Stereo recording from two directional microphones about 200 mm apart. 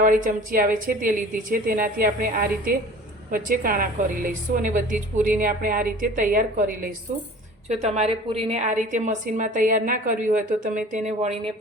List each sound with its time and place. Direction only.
0.0 s a woman's voice: 45° right (ahead or behind)
7.7 s a woman's voice: 35° right (ahead or behind)